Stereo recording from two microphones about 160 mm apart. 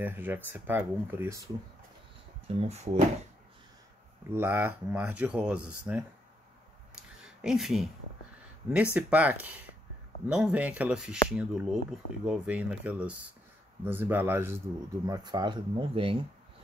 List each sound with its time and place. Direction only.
0.0 s speech: 10° right (ahead or behind)
2.4 s speech: 40° right (ahead or behind)
4.3 s speech: 15° right (ahead or behind)
7.0 s a sound: 5° right (ahead or behind)
8.6 s speech: 10° right (ahead or behind)
15.0 s speech: 25° right (ahead or behind)